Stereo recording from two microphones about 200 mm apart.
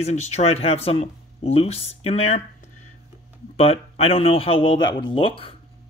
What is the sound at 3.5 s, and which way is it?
Speech, 30° left (ahead or behind).